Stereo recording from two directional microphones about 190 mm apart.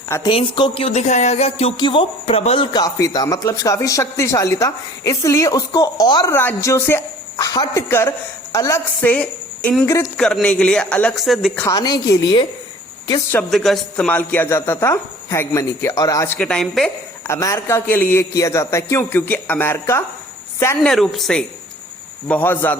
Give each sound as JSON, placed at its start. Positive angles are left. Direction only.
{"t": 0.1, "sound": "a woman's voice", "side_deg": 20}
{"t": 2.7, "sound": "speech", "side_deg": 20}
{"t": 10.2, "sound": "speech", "side_deg": 5}
{"t": 11.6, "sound": "a woman's voice", "side_deg": 20}
{"t": 13.3, "sound": "speech", "side_deg": 0}
{"t": 17.2, "sound": "speech", "side_deg": 15}
{"t": 20.9, "sound": "speech", "side_deg": 0}